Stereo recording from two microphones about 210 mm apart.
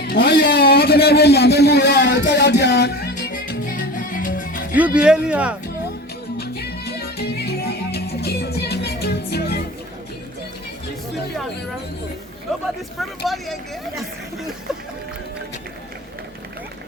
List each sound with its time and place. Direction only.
0.0 s a sound: 50° left (ahead or behind)
4.7 s speech: 5° right (ahead or behind)
6.3 s music: 50° left (ahead or behind)
12.6 s speech: centre (ahead or behind)